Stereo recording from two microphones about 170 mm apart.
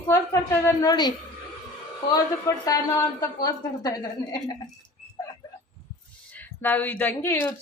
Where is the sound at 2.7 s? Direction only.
20° left (ahead or behind).